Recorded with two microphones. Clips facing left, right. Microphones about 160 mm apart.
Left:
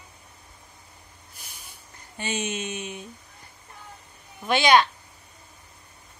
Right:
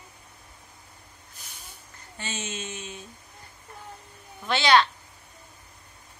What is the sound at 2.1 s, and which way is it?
Speech, 15° left (ahead or behind).